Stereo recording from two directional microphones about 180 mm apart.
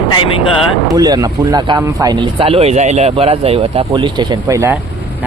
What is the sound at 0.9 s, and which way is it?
Speech, 20° right (ahead or behind).